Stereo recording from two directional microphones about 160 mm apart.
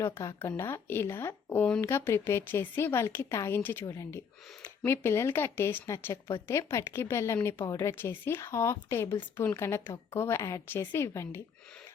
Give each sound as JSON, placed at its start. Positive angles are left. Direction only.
{"t": 0.0, "sound": "a woman's voice", "side_deg": 20}